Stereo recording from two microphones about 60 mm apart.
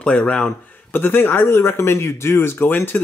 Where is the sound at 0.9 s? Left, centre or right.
Left.